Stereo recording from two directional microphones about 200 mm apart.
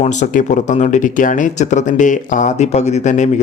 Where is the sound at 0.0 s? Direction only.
35° left (ahead or behind).